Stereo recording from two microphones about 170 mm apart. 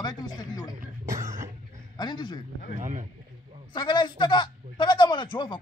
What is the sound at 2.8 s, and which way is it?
Speech, 50° right (ahead or behind).